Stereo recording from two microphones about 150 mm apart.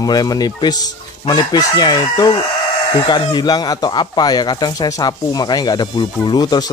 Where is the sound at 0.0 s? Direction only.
25° left (ahead or behind).